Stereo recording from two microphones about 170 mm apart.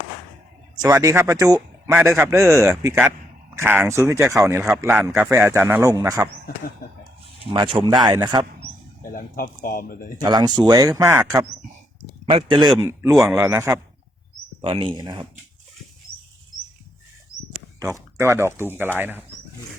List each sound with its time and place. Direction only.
0.8 s a man's voice: 20° right (ahead or behind)
7.5 s speech: 25° right (ahead or behind)
9.1 s speech: 55° left (ahead or behind)
10.2 s speech: 25° right (ahead or behind)
12.2 s speech: 35° right (ahead or behind)
12.9 s a man's voice: 15° right (ahead or behind)
14.6 s speech: 30° right (ahead or behind)
17.9 s a man's voice: 15° right (ahead or behind)